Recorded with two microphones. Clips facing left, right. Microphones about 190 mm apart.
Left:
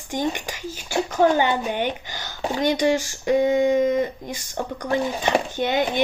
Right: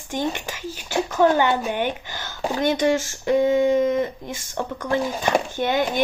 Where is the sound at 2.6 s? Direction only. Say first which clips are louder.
Even; 15° left (ahead or behind).